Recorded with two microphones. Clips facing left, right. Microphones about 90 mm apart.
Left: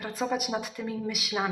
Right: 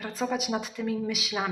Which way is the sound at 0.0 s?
15° left (ahead or behind).